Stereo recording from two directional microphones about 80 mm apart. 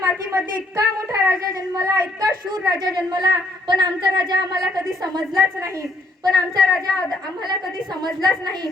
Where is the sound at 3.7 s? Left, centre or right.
Right.